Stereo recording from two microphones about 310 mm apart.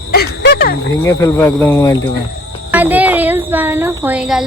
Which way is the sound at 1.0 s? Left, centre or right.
Centre.